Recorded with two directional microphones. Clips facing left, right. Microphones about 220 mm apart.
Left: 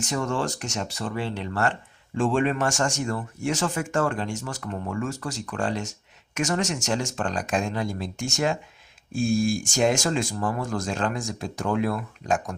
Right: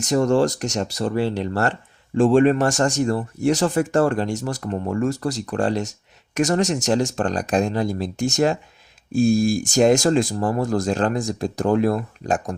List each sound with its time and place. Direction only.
0.0 s speech: 40° right (ahead or behind)